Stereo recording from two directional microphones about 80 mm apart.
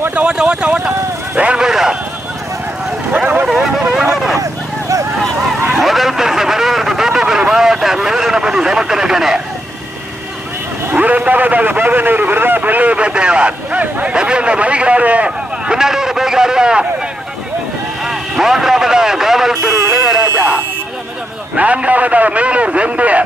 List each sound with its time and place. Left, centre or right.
0.1 s a sound: centre
3.1 s vehicle: centre
3.4 s vehicle: centre
4.4 s vehicle: right
5.8 s vehicle: centre
10.9 s a man's voice: centre
18.0 s speech: centre
19.9 s music: centre
21.5 s a man's voice: centre